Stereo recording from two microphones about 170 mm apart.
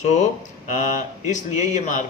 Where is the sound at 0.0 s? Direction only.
45° left (ahead or behind).